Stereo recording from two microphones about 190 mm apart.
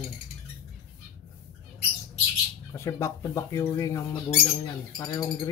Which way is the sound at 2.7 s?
15° left (ahead or behind).